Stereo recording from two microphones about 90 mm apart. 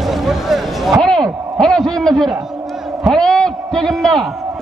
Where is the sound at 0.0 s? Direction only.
Centre (ahead or behind).